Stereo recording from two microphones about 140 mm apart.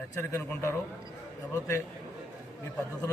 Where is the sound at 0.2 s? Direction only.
20° left (ahead or behind).